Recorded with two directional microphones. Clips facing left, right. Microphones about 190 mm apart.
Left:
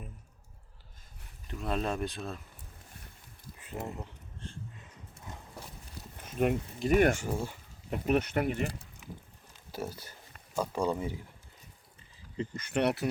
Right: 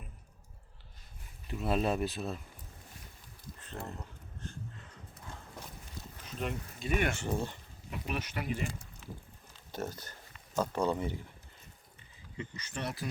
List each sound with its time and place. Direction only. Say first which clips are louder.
1.5 s speech: right 2 dB; 5° right (ahead or behind)
3.6 s speech: left 4 dB; 10° left (ahead or behind)
4.0 s a sound: left 1 dB; 25° left (ahead or behind)
6.2 s speech: left 9 dB; 50° left (ahead or behind)
7.2 s speech: even; 10° left (ahead or behind)
7.9 s speech: left 10 dB; 50° left (ahead or behind)
9.0 s a sound: even; 15° left (ahead or behind)
10.5 s speech: even; 10° left (ahead or behind)
12.5 s speech: left 11 dB; 60° left (ahead or behind)